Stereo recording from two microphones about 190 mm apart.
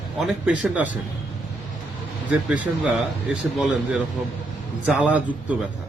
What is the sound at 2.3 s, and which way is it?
A man's voice, 5° right (ahead or behind).